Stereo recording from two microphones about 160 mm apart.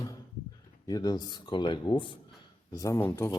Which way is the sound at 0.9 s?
25° left (ahead or behind).